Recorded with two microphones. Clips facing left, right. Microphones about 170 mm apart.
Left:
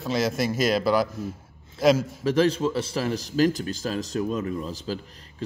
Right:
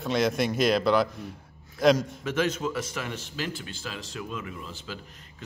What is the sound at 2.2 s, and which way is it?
Speech, 35° left (ahead or behind).